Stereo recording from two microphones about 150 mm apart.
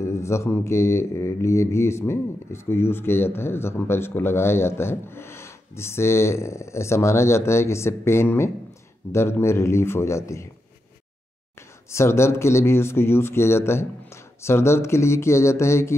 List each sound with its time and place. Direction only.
0.0 s speech: 20° left (ahead or behind)
11.9 s speech: 20° left (ahead or behind)